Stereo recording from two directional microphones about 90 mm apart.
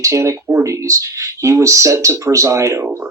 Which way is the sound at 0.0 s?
35° right (ahead or behind).